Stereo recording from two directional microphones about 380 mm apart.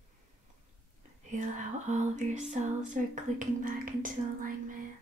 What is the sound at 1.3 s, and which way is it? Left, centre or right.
Speech, centre.